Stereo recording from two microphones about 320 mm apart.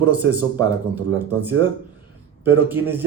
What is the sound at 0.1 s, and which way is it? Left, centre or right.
Speech, centre.